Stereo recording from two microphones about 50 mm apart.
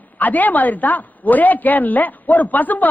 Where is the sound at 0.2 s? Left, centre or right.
Left.